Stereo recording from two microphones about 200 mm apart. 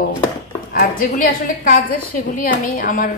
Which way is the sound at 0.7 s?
45° left (ahead or behind).